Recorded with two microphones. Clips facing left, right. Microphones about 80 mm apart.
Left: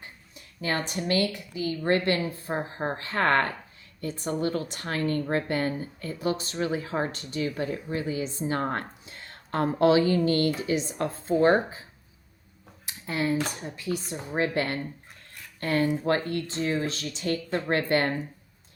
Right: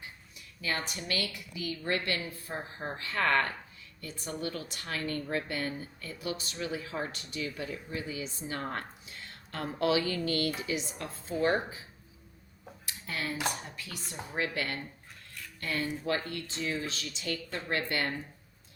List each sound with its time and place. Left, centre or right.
0.3 s speech: left
2.6 s a woman's voice: left
12.8 s a sound: left
13.6 s speech: left